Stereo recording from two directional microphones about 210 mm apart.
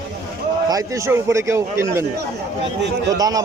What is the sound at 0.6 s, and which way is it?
A man's voice, 15° right (ahead or behind).